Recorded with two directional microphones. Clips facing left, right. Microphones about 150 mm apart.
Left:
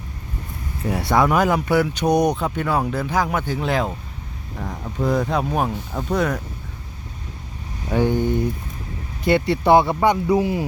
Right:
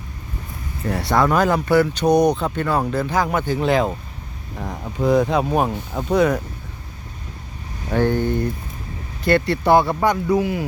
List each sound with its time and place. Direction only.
0.9 s speech: 10° left (ahead or behind)
5.0 s speech: centre (ahead or behind)
7.9 s speech: 15° left (ahead or behind); by 10.6 s 30° left (ahead or behind)